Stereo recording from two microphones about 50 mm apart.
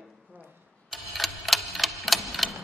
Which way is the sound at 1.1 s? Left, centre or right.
Centre.